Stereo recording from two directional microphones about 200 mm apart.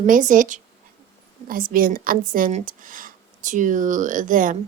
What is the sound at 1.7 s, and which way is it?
Speech, 45° right (ahead or behind).